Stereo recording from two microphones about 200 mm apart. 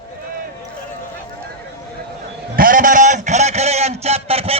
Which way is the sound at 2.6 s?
45° right (ahead or behind).